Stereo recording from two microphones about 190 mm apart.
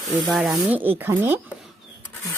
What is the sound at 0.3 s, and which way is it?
Sanding, centre (ahead or behind).